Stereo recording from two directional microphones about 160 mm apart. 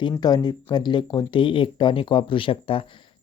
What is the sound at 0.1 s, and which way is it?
Speech, 25° left (ahead or behind).